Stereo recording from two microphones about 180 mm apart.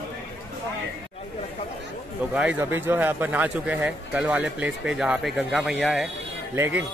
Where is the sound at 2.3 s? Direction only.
5° right (ahead or behind).